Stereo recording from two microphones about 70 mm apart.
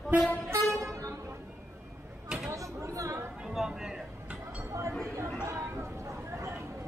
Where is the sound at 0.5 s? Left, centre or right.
Right.